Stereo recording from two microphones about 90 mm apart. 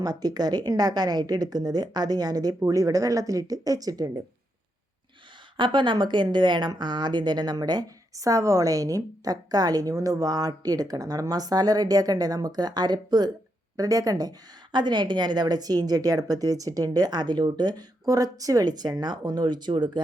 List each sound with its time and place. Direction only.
0.0 s speech: 45° right (ahead or behind)
5.5 s a woman's voice: 60° right (ahead or behind)